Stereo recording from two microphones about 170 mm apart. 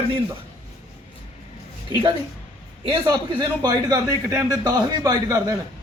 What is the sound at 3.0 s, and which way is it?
Speech, 25° right (ahead or behind).